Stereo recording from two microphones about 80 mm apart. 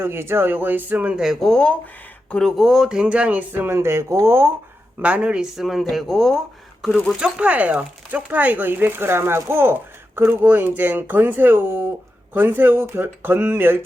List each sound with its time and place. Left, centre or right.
0.0 s speech: right
1.2 s speech: centre
1.5 s speech: centre
2.6 s speech: centre; by 4.5 s right
4.9 s speech: centre
5.5 s speech: centre
7.2 s speech: centre; by 13.8 s right